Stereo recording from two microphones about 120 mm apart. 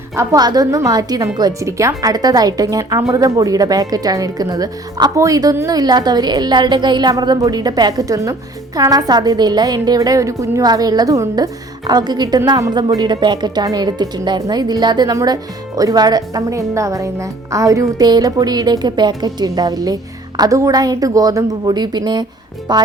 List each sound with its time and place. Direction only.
0.3 s speech: 35° right (ahead or behind)